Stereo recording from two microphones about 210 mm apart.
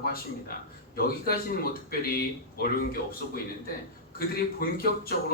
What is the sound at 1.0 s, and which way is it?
A man's voice, 45° left (ahead or behind).